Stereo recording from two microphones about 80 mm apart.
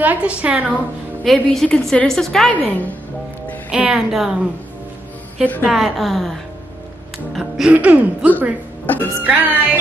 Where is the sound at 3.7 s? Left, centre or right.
Centre.